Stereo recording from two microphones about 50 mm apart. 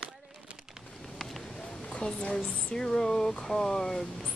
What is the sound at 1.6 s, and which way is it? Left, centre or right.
Speech, centre.